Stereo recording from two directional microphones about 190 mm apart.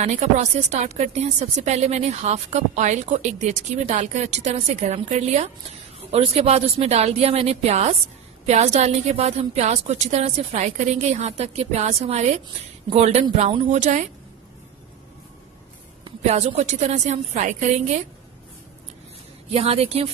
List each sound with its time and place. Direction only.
0.0 s a woman's voice: 35° right (ahead or behind)
16.0 s a woman's voice: 35° right (ahead or behind)
19.5 s a woman's voice: 30° right (ahead or behind)